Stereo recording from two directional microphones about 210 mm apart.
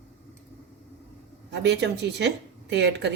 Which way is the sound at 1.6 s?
55° right (ahead or behind).